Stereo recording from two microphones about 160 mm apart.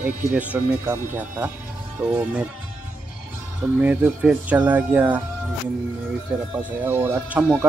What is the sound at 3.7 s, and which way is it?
Speech, 10° right (ahead or behind).